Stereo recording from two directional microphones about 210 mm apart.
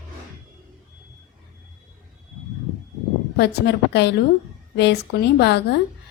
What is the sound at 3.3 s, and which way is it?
Speech, 50° left (ahead or behind).